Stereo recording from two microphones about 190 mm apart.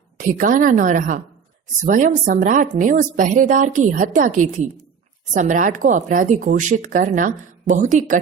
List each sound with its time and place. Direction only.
0.3 s speech: 45° right (ahead or behind)